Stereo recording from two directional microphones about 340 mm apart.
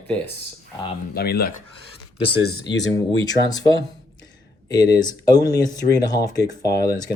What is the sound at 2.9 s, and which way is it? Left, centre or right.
Speech, centre.